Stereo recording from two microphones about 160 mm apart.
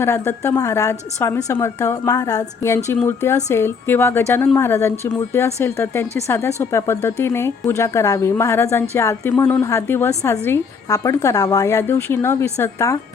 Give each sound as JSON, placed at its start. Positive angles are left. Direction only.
{"t": 0.0, "sound": "a woman's voice", "side_deg": 15}